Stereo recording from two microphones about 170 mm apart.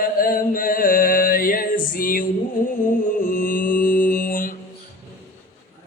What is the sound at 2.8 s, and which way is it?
Mantra, 55° left (ahead or behind).